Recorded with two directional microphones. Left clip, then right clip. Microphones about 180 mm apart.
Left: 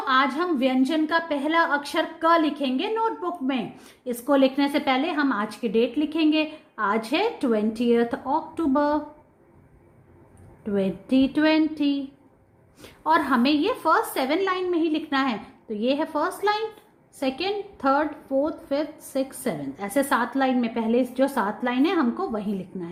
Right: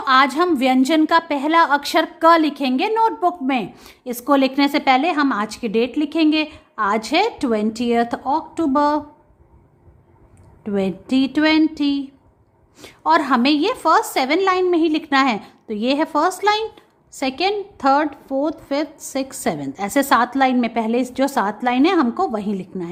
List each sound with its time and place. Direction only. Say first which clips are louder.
0.0 s a woman's voice: right 7 dB; 35° right (ahead or behind)
10.6 s a woman's voice: right 4 dB; 25° right (ahead or behind)